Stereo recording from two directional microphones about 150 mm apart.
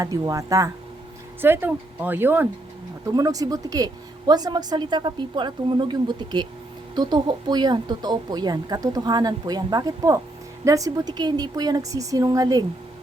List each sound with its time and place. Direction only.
0.0 s a woman's voice: 25° right (ahead or behind)